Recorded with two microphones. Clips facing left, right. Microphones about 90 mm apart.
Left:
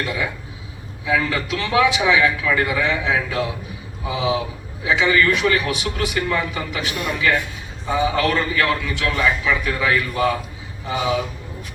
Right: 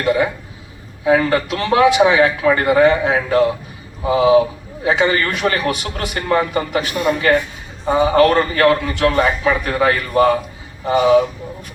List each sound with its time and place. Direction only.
0.0 s a man's voice: 45° right (ahead or behind)